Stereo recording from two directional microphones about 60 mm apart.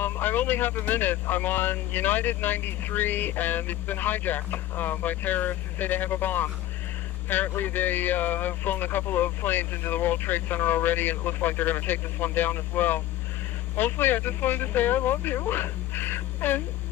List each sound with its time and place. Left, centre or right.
0.0 s speech: left